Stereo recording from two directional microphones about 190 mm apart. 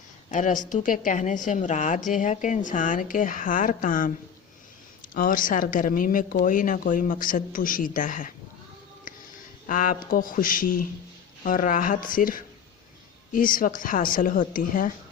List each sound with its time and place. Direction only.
0.3 s a woman's voice: 40° left (ahead or behind)
5.1 s a woman's voice: 45° left (ahead or behind)
9.6 s a woman's voice: 45° left (ahead or behind)